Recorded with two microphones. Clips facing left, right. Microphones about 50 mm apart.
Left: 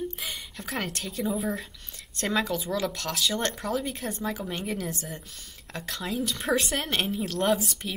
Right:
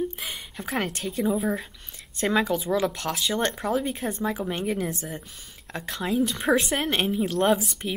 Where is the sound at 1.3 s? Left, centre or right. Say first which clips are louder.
Right 4 dB; centre.